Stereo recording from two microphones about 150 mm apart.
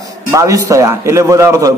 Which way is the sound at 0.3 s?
20° right (ahead or behind).